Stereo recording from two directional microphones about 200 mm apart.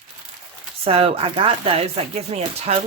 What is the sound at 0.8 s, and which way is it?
Speech, 30° right (ahead or behind).